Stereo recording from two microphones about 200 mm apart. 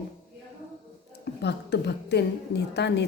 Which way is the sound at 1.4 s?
55° left (ahead or behind).